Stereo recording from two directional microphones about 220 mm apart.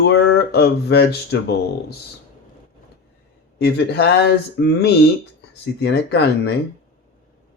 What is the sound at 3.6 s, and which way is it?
Speech, 50° left (ahead or behind).